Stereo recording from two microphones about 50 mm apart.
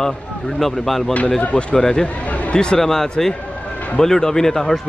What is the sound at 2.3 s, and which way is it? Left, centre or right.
Chatter, left.